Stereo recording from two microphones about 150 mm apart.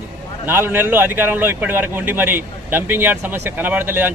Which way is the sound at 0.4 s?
15° right (ahead or behind).